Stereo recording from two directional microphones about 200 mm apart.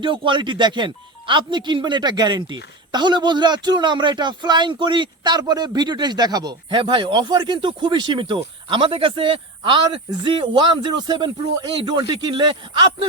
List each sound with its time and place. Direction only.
0.0 s speech: 25° right (ahead or behind)